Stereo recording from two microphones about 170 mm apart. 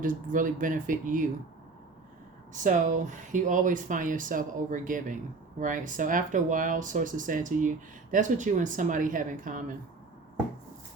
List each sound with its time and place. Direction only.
0.0 s speech: 50° right (ahead or behind)
2.5 s speech: 50° right (ahead or behind)